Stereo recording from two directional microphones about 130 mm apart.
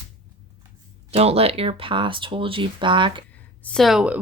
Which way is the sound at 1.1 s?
50° right (ahead or behind).